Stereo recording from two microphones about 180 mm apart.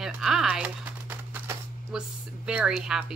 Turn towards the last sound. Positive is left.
turn(degrees=-5)  # may be behind; listen again after turning